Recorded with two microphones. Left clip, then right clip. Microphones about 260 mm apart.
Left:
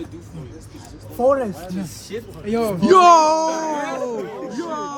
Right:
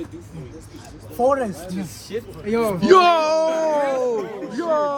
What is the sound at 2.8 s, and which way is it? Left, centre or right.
Music, centre.